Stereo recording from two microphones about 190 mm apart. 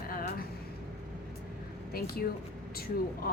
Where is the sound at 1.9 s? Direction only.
50° left (ahead or behind).